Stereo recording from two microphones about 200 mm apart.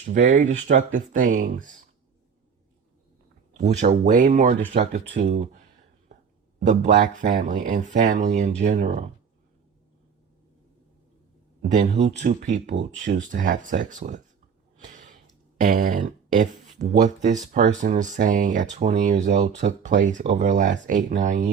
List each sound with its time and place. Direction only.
0.0 s speech: 40° right (ahead or behind)
3.6 s speech: 35° right (ahead or behind)
11.9 s speech: 35° right (ahead or behind)
14.8 s a sound: 40° right (ahead or behind)
16.8 s speech: 50° right (ahead or behind)
17.2 s speech: 35° right (ahead or behind)